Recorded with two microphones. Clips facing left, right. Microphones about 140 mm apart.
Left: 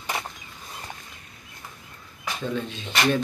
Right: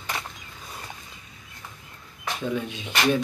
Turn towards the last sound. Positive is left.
turn(degrees=-10)  # may be behind; listen again after turning